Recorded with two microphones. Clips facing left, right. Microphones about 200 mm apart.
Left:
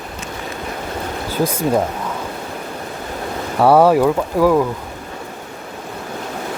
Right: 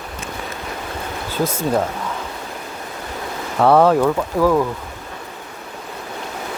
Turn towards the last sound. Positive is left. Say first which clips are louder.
# left 2 dB
turn(degrees=10)  # may be behind; listen again after turning